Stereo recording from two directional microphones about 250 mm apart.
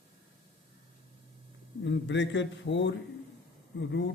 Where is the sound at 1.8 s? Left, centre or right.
Left.